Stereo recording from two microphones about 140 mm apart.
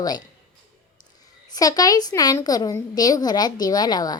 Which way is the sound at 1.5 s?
25° left (ahead or behind).